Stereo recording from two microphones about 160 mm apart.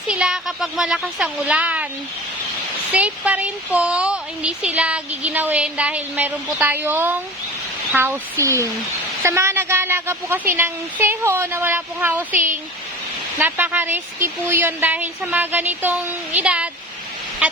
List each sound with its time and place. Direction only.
0.1 s speech: 5° right (ahead or behind)
2.9 s speech: 10° right (ahead or behind)
13.4 s speech: 10° right (ahead or behind)